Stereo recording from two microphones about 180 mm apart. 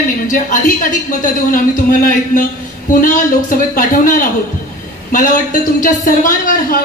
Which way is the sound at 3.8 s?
45° left (ahead or behind).